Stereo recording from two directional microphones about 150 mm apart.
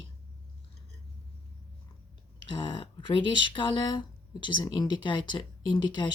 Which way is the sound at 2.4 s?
35° left (ahead or behind).